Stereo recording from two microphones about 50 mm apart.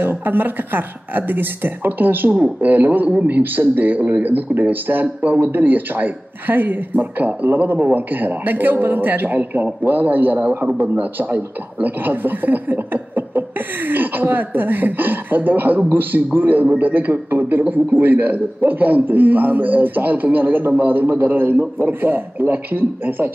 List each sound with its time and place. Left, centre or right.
0.0 s a man's voice: right